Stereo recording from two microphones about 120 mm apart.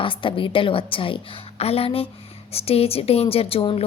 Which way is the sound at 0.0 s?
45° left (ahead or behind).